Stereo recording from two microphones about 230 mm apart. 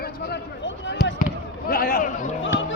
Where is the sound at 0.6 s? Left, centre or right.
Left.